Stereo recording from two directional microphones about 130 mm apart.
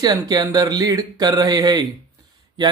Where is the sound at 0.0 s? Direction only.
30° right (ahead or behind).